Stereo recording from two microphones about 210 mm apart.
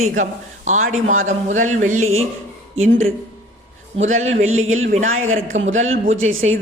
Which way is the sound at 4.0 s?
35° right (ahead or behind).